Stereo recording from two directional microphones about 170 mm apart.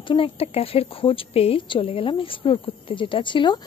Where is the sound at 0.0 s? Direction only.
30° left (ahead or behind).